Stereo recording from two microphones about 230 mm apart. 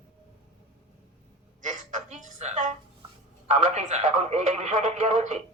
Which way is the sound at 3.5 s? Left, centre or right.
Right.